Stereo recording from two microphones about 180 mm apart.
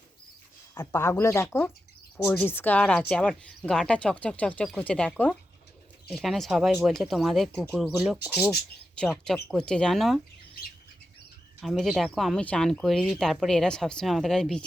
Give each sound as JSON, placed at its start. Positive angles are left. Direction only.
{"t": 0.7, "sound": "speech", "side_deg": 15}
{"t": 11.6, "sound": "speech", "side_deg": 0}